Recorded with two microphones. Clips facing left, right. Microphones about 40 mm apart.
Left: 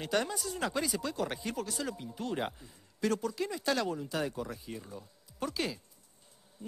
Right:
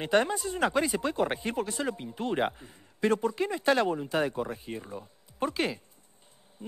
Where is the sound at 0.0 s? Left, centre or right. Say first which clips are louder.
Right 7 dB; right.